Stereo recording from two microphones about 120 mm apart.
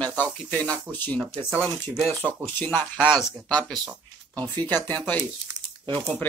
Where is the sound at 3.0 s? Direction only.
5° right (ahead or behind).